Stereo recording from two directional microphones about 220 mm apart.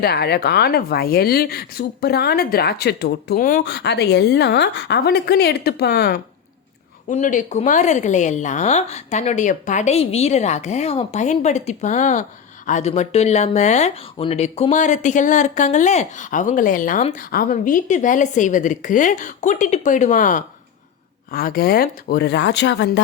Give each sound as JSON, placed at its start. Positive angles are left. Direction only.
{"t": 0.0, "sound": "speech", "side_deg": 45}
{"t": 7.1, "sound": "speech", "side_deg": 35}